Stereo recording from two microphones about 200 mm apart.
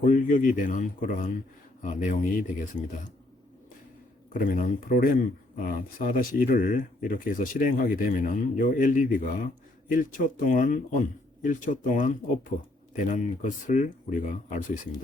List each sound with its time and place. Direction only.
0.0 s speech: 40° left (ahead or behind)
4.4 s speech: 45° left (ahead or behind)